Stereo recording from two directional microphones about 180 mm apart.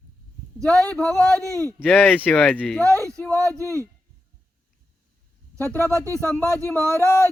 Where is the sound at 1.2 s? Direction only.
20° right (ahead or behind).